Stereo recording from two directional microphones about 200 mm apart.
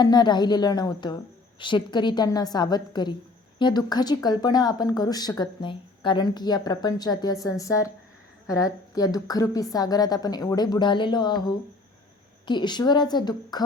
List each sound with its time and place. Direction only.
0.0 s speech: 20° left (ahead or behind)